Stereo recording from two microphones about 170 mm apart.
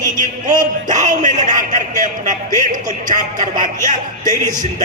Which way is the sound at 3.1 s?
50° right (ahead or behind).